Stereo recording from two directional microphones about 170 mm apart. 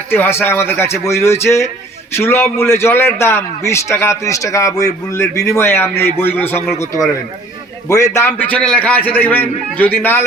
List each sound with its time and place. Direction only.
0.1 s a man's voice: 10° left (ahead or behind)